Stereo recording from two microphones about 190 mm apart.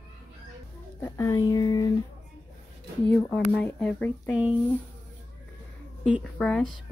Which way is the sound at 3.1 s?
5° left (ahead or behind).